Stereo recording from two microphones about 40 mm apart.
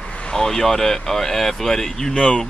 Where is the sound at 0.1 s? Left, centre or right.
Left.